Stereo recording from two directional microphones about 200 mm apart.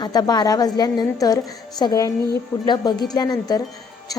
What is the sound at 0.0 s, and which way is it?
A woman's voice, 20° left (ahead or behind).